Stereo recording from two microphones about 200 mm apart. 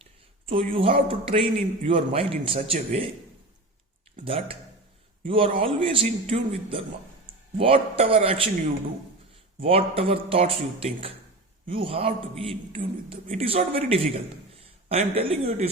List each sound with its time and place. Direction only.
0.7 s a man's voice: 25° right (ahead or behind)
4.2 s a man's voice: 25° right (ahead or behind)
9.6 s a man's voice: 30° right (ahead or behind)